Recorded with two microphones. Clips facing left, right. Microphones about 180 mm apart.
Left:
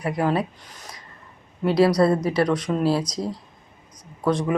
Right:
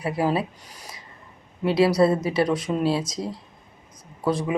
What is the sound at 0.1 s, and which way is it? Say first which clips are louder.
Speech: left 1 dB; 5° right (ahead or behind).